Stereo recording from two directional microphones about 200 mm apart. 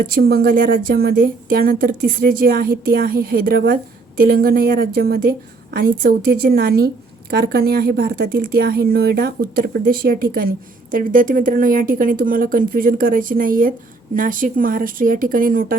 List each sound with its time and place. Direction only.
0.1 s a woman's voice: 50° right (ahead or behind)